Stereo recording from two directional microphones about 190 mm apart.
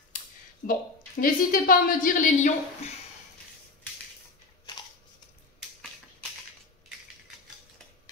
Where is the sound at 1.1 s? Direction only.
50° left (ahead or behind).